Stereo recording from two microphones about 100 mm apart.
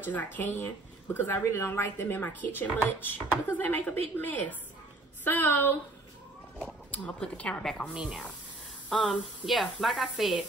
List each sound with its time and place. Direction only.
0.1 s speech: 15° left (ahead or behind)
6.9 s speech: 10° left (ahead or behind)
7.9 s speech: 5° right (ahead or behind)
8.8 s a sound: 10° left (ahead or behind)
9.1 s speech: centre (ahead or behind)